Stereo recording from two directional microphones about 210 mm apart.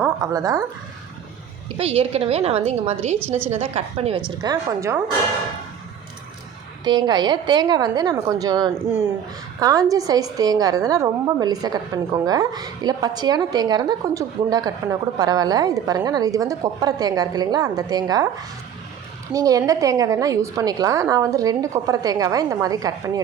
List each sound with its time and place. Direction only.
0.0 s speech: 15° right (ahead or behind)
1.8 s a woman's voice: 25° right (ahead or behind)
3.2 s a woman's voice: 10° right (ahead or behind)
3.5 s a woman's voice: 30° right (ahead or behind)
4.3 s a woman's voice: 15° right (ahead or behind)
6.8 s a woman's voice: 20° right (ahead or behind)
19.3 s a woman's voice: 15° right (ahead or behind)